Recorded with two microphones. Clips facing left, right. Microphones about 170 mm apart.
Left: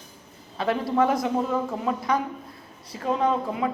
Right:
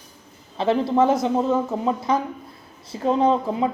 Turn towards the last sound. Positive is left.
turn(degrees=-30)  # may be behind; listen again after turning